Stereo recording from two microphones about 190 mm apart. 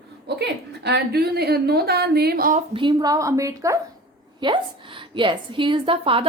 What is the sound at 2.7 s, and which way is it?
A woman's voice, 20° right (ahead or behind).